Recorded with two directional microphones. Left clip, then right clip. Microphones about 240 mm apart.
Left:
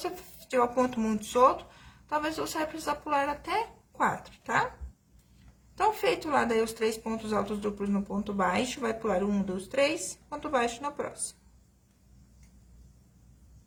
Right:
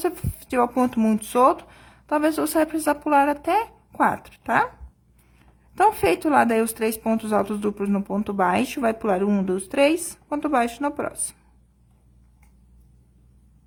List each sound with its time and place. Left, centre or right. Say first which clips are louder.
0.0 s speech: right 10 dB; right
5.8 s speech: right 8 dB; right